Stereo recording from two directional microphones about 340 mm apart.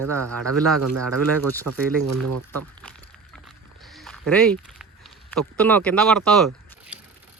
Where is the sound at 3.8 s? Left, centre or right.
Centre.